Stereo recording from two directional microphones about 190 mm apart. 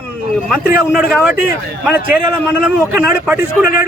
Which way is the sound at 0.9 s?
5° right (ahead or behind).